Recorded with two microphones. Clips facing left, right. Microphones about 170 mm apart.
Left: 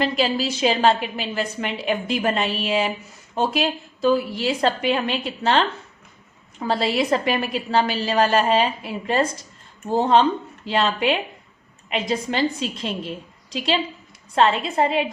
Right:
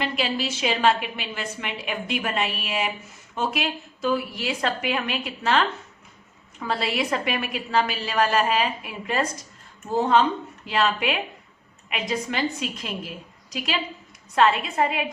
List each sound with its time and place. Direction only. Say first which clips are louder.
0.0 s a woman's voice: left 5 dB; 35° left (ahead or behind)